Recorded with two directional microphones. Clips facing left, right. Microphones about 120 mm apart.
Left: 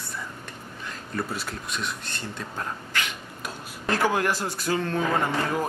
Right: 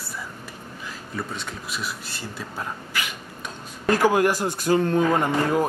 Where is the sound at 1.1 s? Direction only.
Centre (ahead or behind).